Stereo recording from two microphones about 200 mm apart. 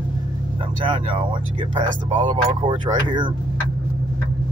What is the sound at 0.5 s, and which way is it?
Speech, 25° right (ahead or behind).